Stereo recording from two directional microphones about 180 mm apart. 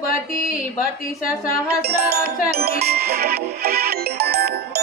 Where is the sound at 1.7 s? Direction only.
60° right (ahead or behind).